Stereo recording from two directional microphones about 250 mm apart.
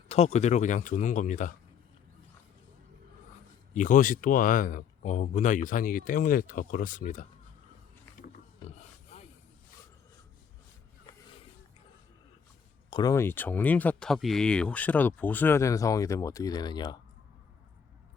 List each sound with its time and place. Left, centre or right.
0.1 s speech: left
3.8 s speech: left
9.1 s snake: left
12.9 s speech: centre